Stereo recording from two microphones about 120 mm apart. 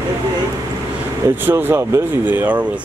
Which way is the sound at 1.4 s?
15° right (ahead or behind).